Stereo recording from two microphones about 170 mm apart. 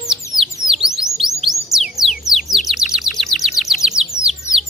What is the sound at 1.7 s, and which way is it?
Music, centre (ahead or behind).